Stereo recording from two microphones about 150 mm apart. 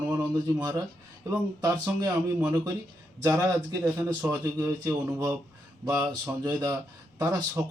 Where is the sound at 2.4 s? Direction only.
10° right (ahead or behind).